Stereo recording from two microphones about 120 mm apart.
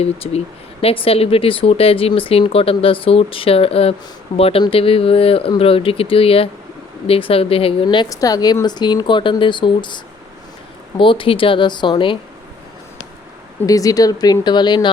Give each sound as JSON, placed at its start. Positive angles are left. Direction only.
{"t": 0.0, "sound": "speech", "side_deg": 55}
{"t": 8.1, "sound": "speech", "side_deg": 30}
{"t": 13.7, "sound": "speech", "side_deg": 30}